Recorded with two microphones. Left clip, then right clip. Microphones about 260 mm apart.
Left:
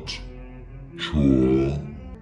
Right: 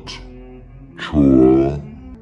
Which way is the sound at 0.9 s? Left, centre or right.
Centre.